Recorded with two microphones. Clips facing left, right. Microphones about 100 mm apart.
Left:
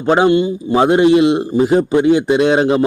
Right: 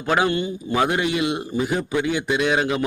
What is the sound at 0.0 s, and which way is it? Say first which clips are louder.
A man's voice: left 9 dB; 30° left (ahead or behind).